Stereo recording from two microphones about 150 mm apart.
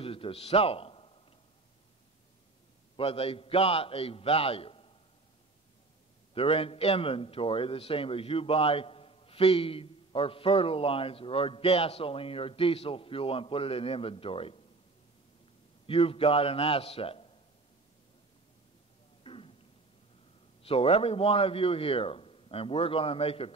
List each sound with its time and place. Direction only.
0.0 s a sound: 40° left (ahead or behind)
3.0 s a man's voice: 40° left (ahead or behind)
6.3 s a man's voice: 40° left (ahead or behind)
15.9 s a man's voice: 40° left (ahead or behind)
19.2 s a sound: 35° left (ahead or behind)
20.6 s a man's voice: 40° left (ahead or behind)